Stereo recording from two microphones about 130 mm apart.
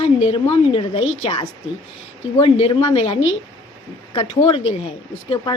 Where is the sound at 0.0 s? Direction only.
50° left (ahead or behind).